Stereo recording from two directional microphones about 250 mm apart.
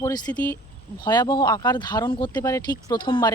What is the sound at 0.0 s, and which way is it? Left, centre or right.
Speech, centre.